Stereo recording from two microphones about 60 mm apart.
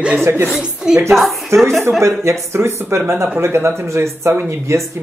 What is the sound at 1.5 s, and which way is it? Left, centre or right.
Speech, right.